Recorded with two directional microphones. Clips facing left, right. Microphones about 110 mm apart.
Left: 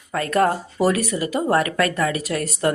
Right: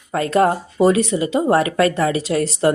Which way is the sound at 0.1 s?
25° right (ahead or behind).